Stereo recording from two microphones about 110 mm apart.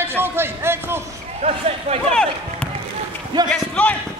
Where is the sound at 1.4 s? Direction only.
75° right (ahead or behind).